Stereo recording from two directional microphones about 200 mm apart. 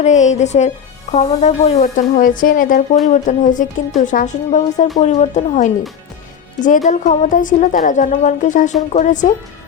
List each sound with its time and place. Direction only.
0.0 s a woman's voice: 35° left (ahead or behind)